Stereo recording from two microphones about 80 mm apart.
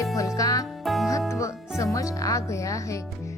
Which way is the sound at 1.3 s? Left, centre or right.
Left.